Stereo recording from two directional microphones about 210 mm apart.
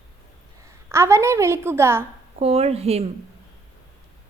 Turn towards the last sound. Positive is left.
turn(degrees=-30)  # may be behind; listen again after turning